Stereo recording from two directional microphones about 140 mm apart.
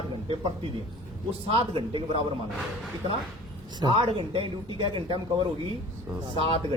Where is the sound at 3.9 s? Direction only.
40° right (ahead or behind).